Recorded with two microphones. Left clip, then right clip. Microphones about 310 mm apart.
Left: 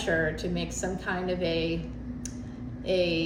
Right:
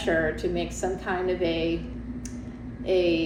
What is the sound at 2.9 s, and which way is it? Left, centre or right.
Speech, centre.